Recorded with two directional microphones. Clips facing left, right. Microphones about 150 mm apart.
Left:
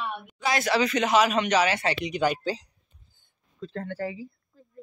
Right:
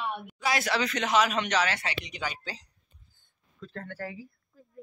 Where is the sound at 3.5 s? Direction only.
20° left (ahead or behind).